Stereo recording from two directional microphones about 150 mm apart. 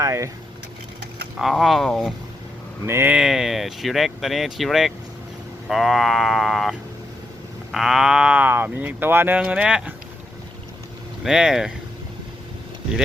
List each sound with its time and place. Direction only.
0.0 s speech: 20° right (ahead or behind)
1.4 s speech: centre (ahead or behind)
2.8 s speech: 15° right (ahead or behind)
11.2 s speech: 5° right (ahead or behind)